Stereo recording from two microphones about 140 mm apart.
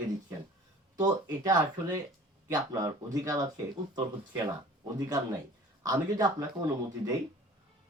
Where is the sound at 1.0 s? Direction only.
30° right (ahead or behind).